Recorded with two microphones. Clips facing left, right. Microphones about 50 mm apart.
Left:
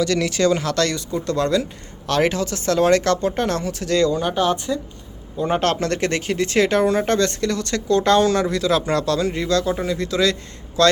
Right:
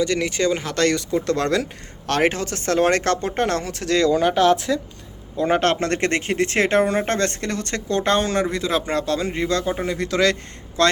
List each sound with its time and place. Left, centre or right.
0.0 s speech: right
0.9 s speech: right
4.1 s speech: right
5.5 s speech: right
10.8 s speech: right